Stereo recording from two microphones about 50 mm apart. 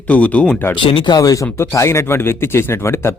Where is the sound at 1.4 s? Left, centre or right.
Left.